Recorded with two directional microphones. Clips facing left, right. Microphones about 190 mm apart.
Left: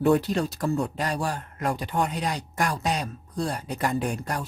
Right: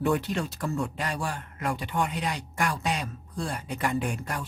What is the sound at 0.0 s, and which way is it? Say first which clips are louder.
Speech: left 5 dB; 35° left (ahead or behind).